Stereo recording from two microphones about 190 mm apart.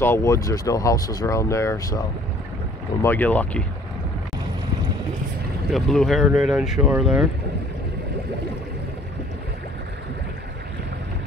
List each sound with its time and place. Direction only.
0.0 s speech: 15° left (ahead or behind)
5.7 s speech: centre (ahead or behind)